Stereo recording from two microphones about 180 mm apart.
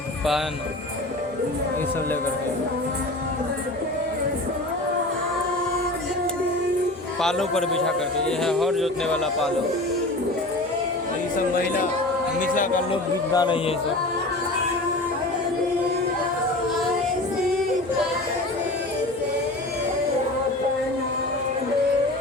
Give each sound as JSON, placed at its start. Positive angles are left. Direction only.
{"t": 7.2, "sound": "speech", "side_deg": 5}
{"t": 11.3, "sound": "speech", "side_deg": 50}
{"t": 12.9, "sound": "speech", "side_deg": 25}